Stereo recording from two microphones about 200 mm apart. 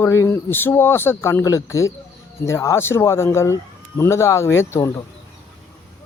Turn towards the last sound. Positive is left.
turn(degrees=15)  # may be behind; listen again after turning